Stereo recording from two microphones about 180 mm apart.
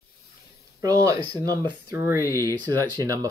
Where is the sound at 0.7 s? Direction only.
15° right (ahead or behind).